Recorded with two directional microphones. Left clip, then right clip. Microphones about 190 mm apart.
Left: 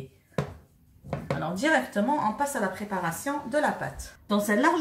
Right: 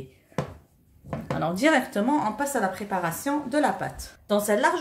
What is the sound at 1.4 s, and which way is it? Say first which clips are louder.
Speech: right 3 dB; 35° right (ahead or behind).